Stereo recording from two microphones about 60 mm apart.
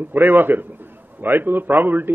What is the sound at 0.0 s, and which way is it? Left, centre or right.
A man's voice, right.